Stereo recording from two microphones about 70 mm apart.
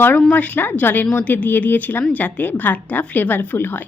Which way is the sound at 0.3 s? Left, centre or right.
Left.